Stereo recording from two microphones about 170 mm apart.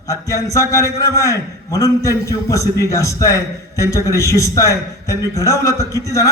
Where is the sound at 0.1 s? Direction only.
20° left (ahead or behind).